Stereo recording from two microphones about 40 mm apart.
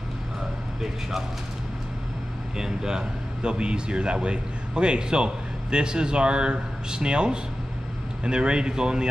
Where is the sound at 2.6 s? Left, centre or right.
Centre.